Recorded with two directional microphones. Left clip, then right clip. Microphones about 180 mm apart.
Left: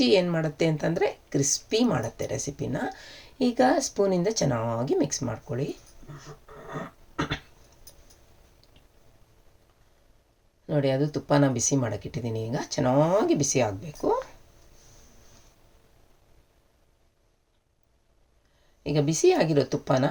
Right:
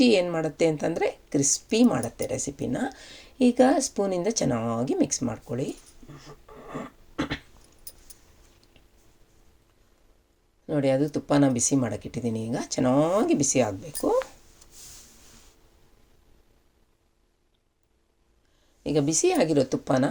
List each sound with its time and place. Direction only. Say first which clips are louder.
0.0 s a woman's voice: right 1 dB; 30° right (ahead or behind)
10.7 s a woman's voice: right 2 dB; 35° right (ahead or behind)
18.8 s a woman's voice: even; 35° right (ahead or behind)